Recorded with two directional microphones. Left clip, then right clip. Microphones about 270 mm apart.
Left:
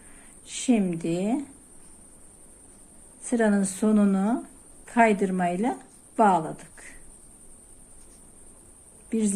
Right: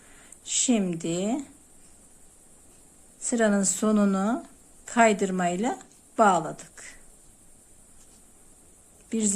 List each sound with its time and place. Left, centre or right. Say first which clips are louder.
0.4 s speech: even; centre
3.2 s speech: even; centre
9.0 s a woman's voice: left 1 dB; centre